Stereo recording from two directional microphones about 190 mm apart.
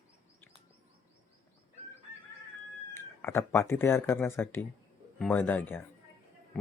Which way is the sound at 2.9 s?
10° left (ahead or behind).